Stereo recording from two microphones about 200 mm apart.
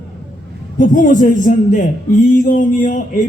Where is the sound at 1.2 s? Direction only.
40° left (ahead or behind).